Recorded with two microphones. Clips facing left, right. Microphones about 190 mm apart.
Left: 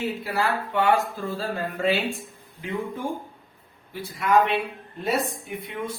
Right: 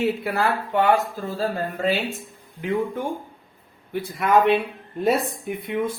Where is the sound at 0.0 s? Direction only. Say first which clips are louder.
Right 4 dB; 60° right (ahead or behind).